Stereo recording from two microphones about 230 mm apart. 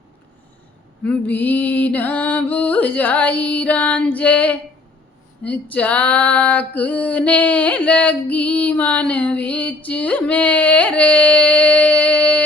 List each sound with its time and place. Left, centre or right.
1.0 s female singing: centre